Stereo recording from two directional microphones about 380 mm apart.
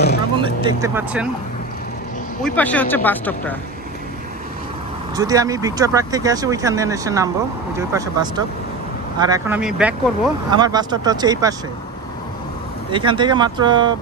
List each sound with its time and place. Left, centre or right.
0.4 s speech: centre
2.4 s speech: centre
5.1 s speech: centre
12.9 s speech: centre